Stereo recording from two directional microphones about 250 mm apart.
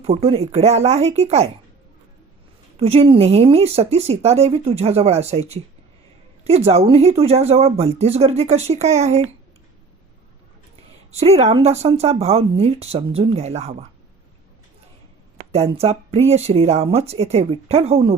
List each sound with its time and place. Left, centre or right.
0.0 s speech: right
2.7 s speech: right
6.7 s speech: right
11.1 s speech: right
15.5 s speech: right